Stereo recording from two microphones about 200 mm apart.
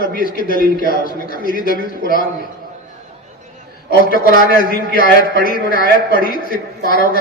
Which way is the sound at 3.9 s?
45° left (ahead or behind).